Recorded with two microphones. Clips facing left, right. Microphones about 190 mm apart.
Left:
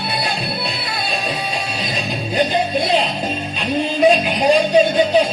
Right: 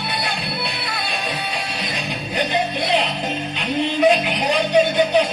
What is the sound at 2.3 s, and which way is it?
Music, 35° left (ahead or behind).